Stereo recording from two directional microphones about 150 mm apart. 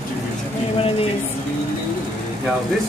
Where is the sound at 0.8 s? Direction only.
40° left (ahead or behind).